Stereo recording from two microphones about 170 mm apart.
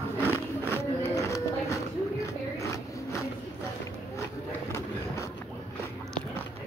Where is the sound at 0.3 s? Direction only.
15° left (ahead or behind).